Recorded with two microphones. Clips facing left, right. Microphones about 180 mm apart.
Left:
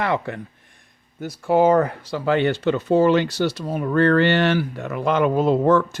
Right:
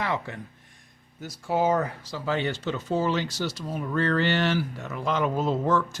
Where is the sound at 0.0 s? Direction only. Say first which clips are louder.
Left 6 dB; 60° left (ahead or behind).